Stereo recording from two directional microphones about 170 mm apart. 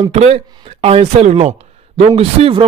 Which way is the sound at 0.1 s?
40° right (ahead or behind).